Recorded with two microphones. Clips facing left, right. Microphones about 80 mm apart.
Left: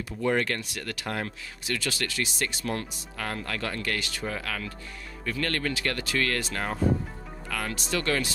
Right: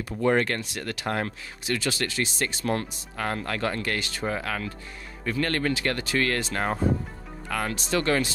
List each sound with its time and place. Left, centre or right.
0.2 s speech: right